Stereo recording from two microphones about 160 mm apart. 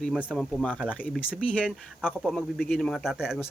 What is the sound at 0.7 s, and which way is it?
Speech, 5° right (ahead or behind).